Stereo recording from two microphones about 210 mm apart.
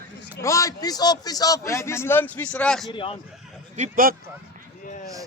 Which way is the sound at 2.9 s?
25° left (ahead or behind).